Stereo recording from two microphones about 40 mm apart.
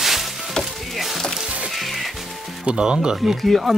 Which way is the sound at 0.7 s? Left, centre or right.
Centre.